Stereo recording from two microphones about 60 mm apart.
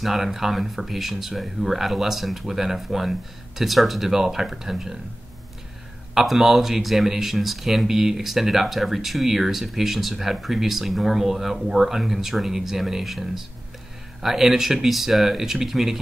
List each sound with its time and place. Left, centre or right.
0.0 s speech: centre
6.1 s speech: centre